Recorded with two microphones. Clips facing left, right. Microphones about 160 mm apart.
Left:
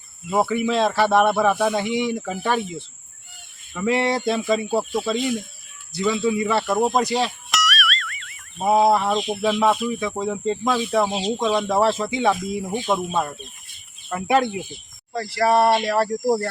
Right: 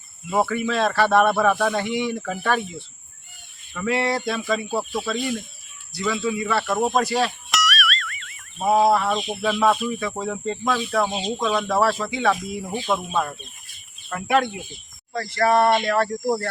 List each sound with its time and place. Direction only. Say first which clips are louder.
0.3 s speech: left 2 dB; 10° left (ahead or behind)
3.8 s speech: left 2 dB; 20° left (ahead or behind)
7.5 s music: even; centre (ahead or behind)
8.5 s speech: left 1 dB; 20° left (ahead or behind)
14.1 s speech: left 2 dB; 20° left (ahead or behind)
15.4 s speech: left 1 dB; 10° left (ahead or behind)